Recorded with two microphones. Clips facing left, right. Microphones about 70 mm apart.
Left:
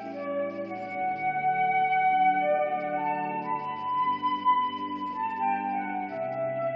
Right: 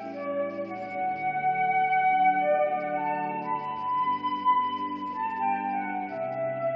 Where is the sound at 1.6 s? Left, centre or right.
Centre.